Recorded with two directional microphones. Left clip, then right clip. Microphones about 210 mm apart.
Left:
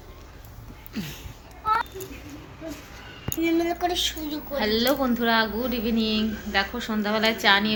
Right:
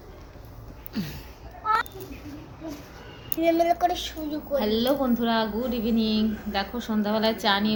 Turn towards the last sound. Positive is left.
turn(degrees=0)  # may be behind; listen again after turning